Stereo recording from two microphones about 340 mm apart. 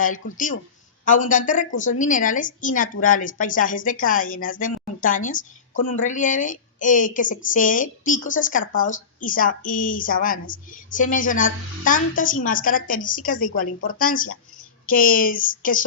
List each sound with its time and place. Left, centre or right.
0.2 s a woman's voice: left